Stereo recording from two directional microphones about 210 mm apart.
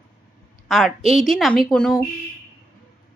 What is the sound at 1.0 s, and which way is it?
Speech, 35° left (ahead or behind).